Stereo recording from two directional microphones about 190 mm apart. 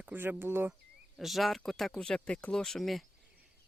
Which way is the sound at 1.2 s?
Centre (ahead or behind).